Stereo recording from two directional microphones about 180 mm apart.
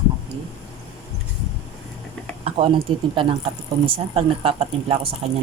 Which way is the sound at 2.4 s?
30° right (ahead or behind).